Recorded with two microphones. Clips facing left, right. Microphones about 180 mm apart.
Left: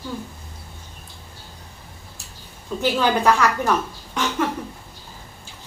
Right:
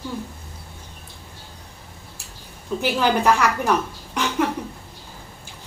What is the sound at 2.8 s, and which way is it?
Speech, 10° right (ahead or behind).